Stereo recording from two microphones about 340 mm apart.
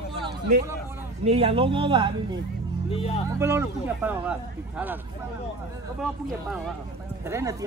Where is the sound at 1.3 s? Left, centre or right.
Centre.